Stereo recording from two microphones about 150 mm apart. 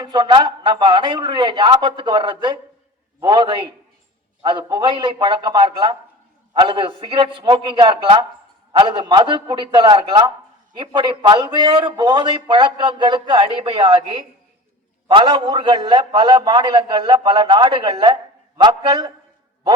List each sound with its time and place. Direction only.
0.0 s a man's voice: 30° right (ahead or behind)